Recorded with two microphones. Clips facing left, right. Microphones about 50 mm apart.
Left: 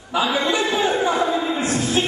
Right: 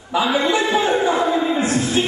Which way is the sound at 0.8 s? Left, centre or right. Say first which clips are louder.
Right 2 dB; centre.